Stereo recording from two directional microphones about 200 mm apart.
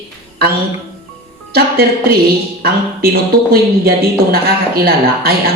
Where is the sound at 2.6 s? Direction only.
50° right (ahead or behind).